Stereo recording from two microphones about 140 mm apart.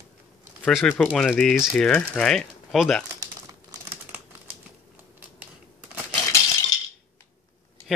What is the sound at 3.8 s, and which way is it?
Typing, 15° right (ahead or behind).